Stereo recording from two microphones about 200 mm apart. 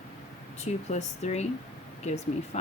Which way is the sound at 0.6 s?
35° left (ahead or behind).